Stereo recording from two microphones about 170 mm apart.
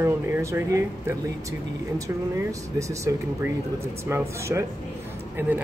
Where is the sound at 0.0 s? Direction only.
15° right (ahead or behind).